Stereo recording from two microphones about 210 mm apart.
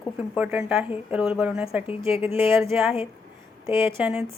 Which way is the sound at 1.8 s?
25° left (ahead or behind).